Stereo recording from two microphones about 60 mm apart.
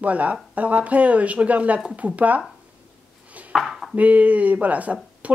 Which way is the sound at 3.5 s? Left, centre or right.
Centre.